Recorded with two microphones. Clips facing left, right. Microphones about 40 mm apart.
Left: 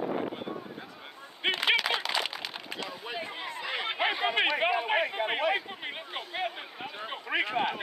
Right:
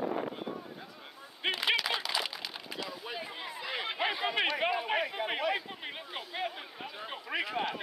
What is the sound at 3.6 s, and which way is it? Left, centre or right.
Chatter, centre.